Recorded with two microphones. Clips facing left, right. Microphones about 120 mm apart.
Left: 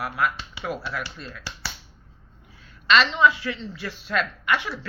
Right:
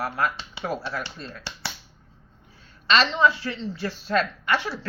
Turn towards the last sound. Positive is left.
turn(degrees=-35)  # may be behind; listen again after turning